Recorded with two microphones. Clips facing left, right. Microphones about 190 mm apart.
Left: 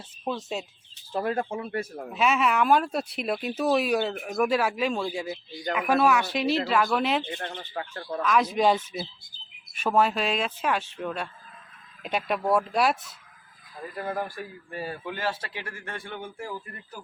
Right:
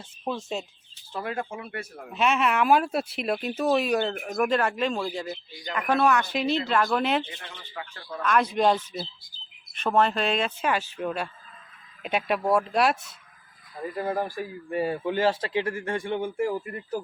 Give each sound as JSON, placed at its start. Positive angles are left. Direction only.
{"t": 0.3, "sound": "speech", "side_deg": 0}
{"t": 1.1, "sound": "speech", "side_deg": 35}
{"t": 2.1, "sound": "speech", "side_deg": 0}
{"t": 7.3, "sound": "speech", "side_deg": 50}
{"t": 8.2, "sound": "speech", "side_deg": 0}
{"t": 13.9, "sound": "a man's voice", "side_deg": -20}